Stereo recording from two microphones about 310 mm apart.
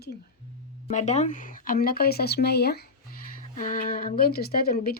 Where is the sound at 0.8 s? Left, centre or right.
Left.